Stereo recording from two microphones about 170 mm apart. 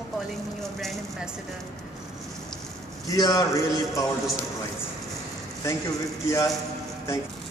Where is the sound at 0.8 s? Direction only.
Centre (ahead or behind).